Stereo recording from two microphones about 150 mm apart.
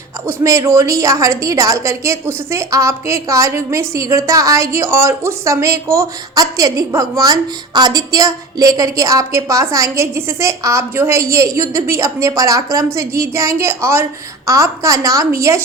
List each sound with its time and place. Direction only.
0.3 s a woman's voice: 20° right (ahead or behind)